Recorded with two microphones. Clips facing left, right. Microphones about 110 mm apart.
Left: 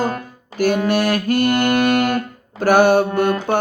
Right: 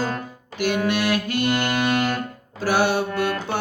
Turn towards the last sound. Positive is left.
turn(degrees=50)  # may be behind; listen again after turning